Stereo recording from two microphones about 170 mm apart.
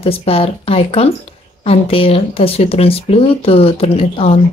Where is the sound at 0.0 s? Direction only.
35° left (ahead or behind).